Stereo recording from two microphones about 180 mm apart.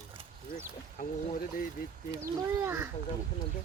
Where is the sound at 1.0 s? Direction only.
50° left (ahead or behind).